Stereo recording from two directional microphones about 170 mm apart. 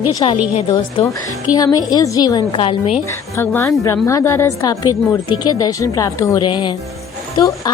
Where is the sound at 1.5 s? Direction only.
20° left (ahead or behind).